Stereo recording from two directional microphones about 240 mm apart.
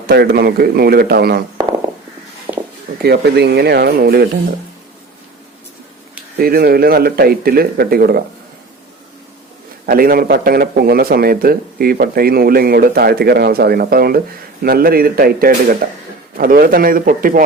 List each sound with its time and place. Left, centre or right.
0.1 s speech: right
2.5 s a sound: centre
3.0 s speech: right
6.4 s speech: right
9.8 s speech: right